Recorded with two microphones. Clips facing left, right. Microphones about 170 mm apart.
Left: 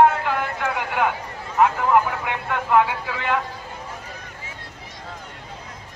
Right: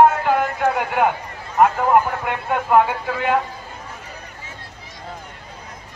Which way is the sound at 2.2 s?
50° right (ahead or behind).